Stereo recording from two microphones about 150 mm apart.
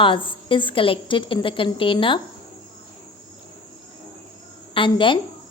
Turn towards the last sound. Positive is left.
turn(degrees=35)  # may be behind; listen again after turning